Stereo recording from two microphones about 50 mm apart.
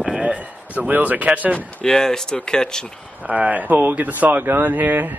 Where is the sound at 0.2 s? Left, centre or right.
Right.